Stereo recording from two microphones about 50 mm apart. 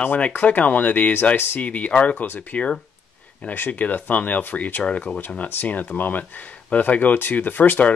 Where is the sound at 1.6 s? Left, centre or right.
Left.